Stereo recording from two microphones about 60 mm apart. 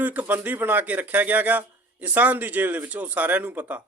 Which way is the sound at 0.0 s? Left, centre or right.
Right.